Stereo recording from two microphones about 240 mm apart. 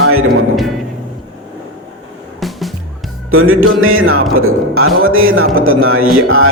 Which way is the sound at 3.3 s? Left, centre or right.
Right.